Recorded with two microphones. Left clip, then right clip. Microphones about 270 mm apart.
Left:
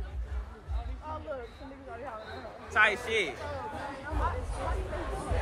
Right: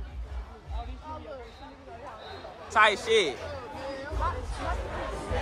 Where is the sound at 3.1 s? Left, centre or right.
Right.